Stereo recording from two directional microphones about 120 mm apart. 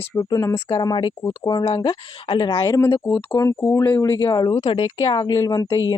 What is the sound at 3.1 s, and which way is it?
Speech, 50° left (ahead or behind).